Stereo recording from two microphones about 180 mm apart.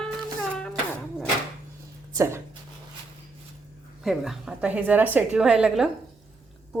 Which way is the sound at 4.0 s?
Centre (ahead or behind).